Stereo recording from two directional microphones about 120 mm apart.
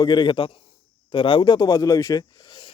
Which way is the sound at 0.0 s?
40° left (ahead or behind).